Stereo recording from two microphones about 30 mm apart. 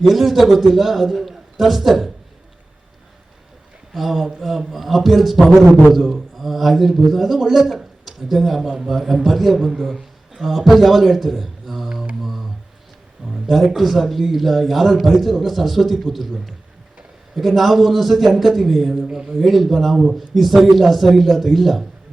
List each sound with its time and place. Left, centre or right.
0.0 s a man's voice: centre
3.9 s a man's voice: centre
12.2 s a sound: centre
13.2 s a sound: right
13.7 s a man's voice: centre
17.3 s a man's voice: centre